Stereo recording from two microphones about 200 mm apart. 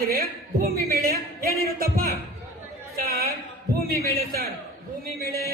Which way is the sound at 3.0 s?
50° right (ahead or behind).